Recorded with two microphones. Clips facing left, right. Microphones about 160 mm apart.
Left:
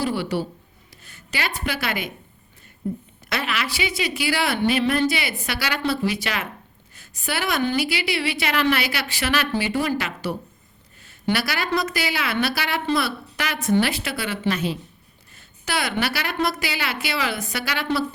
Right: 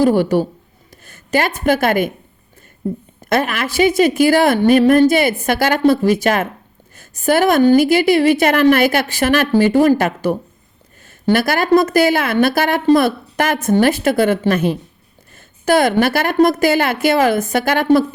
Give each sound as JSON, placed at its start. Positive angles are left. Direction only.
{"t": 0.0, "sound": "a woman's voice", "side_deg": -45}
{"t": 3.2, "sound": "a woman's voice", "side_deg": -50}